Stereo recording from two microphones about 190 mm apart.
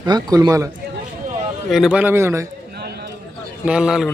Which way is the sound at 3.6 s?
5° right (ahead or behind).